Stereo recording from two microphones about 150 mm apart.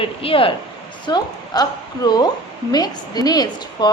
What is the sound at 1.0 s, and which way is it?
A woman's voice, 25° left (ahead or behind).